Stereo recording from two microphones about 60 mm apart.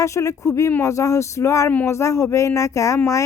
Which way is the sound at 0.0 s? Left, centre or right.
Left.